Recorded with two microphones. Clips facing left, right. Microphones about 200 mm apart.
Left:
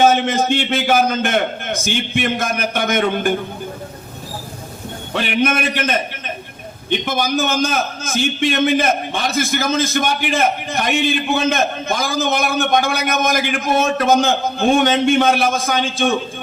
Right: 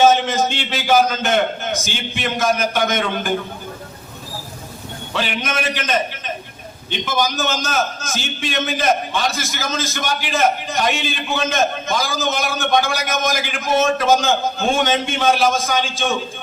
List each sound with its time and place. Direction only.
0.0 s a man's voice: 55° left (ahead or behind)
5.1 s a man's voice: 55° left (ahead or behind)
7.0 s a man's voice: 55° left (ahead or behind)